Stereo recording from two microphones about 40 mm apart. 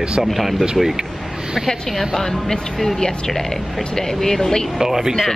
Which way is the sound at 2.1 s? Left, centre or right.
Centre.